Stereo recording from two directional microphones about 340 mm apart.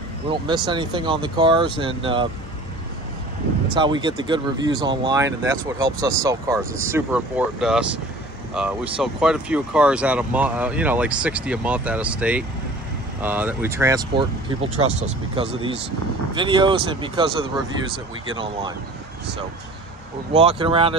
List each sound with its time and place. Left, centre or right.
0.3 s speech: centre
3.7 s speech: centre
18.3 s speech: centre
20.3 s speech: centre